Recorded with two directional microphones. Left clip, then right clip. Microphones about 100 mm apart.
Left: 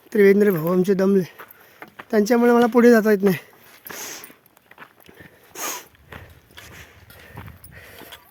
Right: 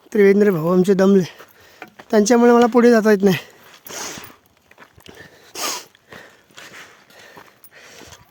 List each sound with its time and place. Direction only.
0.1 s speech: 30° right (ahead or behind); by 2.5 s 65° right (ahead or behind)
2.5 s speech: 45° right (ahead or behind)
3.1 s speech: 75° right (ahead or behind)
5.5 s sneeze: 35° right (ahead or behind)
7.3 s a sound: 20° right (ahead or behind)